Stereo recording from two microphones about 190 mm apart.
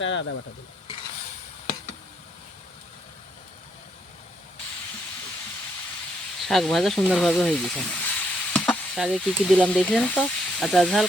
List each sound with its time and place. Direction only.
0.0 s speech: 75° left (ahead or behind)
6.4 s a sound: centre (ahead or behind)
9.0 s speech: centre (ahead or behind)